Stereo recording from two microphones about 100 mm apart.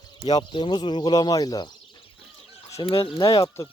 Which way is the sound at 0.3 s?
50° left (ahead or behind).